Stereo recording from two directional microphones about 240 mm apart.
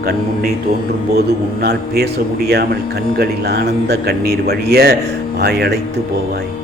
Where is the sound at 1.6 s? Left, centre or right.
Right.